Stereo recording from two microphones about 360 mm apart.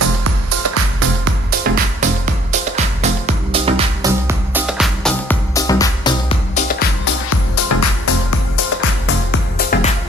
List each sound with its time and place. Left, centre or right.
0.6 s music: right; by 6.3 s centre
6.7 s music: left
9.6 s music: left